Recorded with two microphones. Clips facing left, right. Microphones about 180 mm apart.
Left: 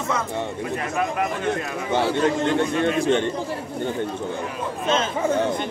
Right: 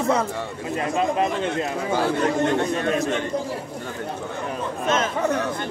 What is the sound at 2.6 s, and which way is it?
Speech, 35° right (ahead or behind).